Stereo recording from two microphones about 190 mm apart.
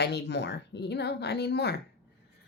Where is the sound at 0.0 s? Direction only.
60° left (ahead or behind).